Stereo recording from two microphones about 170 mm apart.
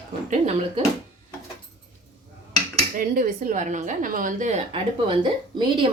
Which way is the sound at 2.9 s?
55° right (ahead or behind).